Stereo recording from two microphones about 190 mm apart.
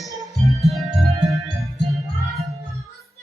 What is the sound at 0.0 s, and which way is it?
Music, centre (ahead or behind).